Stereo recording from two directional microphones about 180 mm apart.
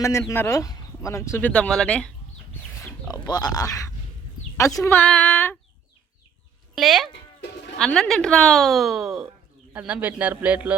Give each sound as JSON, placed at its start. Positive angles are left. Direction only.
{"t": 0.0, "sound": "speech", "side_deg": 15}
{"t": 2.6, "sound": "pig", "side_deg": 10}
{"t": 3.1, "sound": "speech", "side_deg": 20}
{"t": 6.7, "sound": "a man's voice", "side_deg": 0}